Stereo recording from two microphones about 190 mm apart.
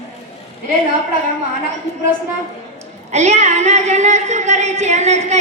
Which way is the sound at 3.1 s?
35° right (ahead or behind).